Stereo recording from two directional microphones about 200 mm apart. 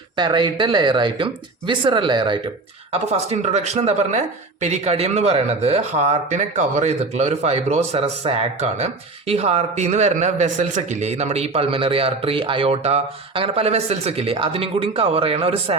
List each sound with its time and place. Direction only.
0.2 s speech: 25° right (ahead or behind)